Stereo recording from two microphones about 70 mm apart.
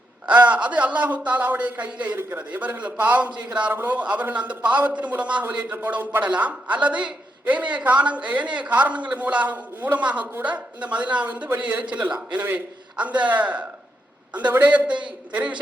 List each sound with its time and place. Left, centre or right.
0.3 s a man's voice: right